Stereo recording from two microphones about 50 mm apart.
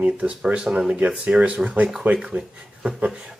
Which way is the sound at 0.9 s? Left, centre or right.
Right.